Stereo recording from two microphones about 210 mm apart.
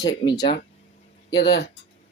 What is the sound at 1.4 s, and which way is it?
Speech, 50° left (ahead or behind).